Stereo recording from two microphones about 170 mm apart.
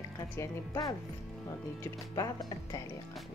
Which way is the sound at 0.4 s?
20° left (ahead or behind).